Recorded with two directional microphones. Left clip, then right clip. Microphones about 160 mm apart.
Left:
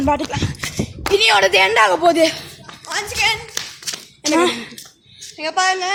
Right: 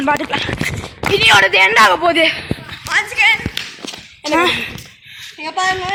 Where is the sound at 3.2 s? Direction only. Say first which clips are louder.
Right 4 dB; 55° left (ahead or behind).